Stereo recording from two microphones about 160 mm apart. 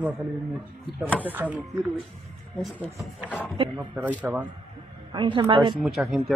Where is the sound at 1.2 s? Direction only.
10° right (ahead or behind).